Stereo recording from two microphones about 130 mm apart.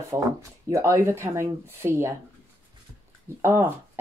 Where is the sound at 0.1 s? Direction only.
25° right (ahead or behind).